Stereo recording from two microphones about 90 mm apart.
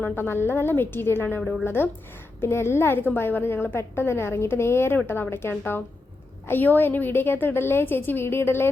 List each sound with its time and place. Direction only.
0.0 s a woman's voice: 25° left (ahead or behind)
1.4 s a woman's voice: 5° left (ahead or behind)
1.6 s a woman's voice: 25° left (ahead or behind)